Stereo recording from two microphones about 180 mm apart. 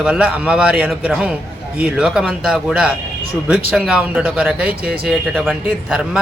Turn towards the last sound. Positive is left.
turn(degrees=-5)  # may be behind; listen again after turning